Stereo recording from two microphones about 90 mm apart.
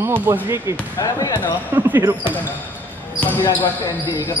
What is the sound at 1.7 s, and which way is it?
Speech, 25° right (ahead or behind).